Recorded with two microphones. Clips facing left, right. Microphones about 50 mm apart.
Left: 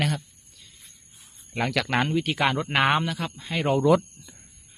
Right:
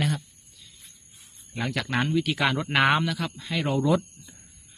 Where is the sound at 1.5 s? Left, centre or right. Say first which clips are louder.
Left 4 dB; left.